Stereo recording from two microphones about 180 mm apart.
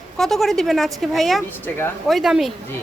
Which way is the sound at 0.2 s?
Centre (ahead or behind).